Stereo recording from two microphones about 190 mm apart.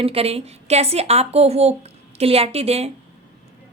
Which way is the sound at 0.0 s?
30° right (ahead or behind).